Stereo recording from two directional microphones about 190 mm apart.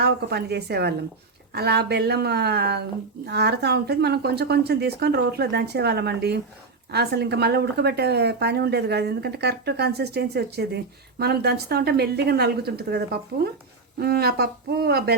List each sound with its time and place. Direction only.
0.0 s speech: 60° right (ahead or behind)
14.0 s speech: 55° right (ahead or behind)